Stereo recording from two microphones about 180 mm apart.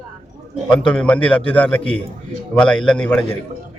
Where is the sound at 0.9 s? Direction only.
5° left (ahead or behind).